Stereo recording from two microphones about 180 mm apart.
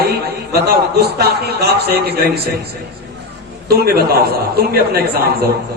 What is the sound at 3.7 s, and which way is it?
Speech, 60° right (ahead or behind).